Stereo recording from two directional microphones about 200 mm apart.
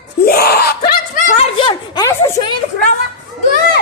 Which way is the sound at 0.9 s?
40° left (ahead or behind).